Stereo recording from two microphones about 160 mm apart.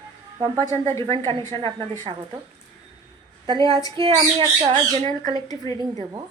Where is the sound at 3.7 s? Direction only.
20° left (ahead or behind).